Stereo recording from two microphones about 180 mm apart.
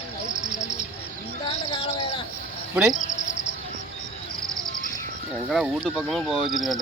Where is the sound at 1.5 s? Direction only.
25° left (ahead or behind).